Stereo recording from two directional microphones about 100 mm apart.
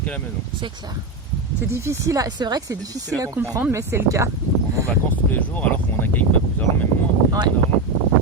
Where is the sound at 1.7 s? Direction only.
25° right (ahead or behind).